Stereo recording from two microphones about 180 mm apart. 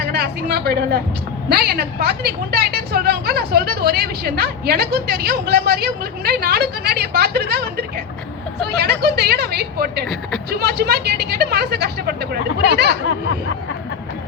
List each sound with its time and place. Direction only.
0.0 s a woman's voice: 65° right (ahead or behind)